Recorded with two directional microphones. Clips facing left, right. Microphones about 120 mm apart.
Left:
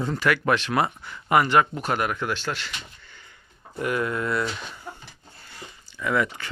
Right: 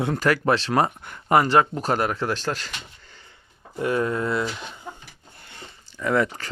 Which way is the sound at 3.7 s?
30° right (ahead or behind).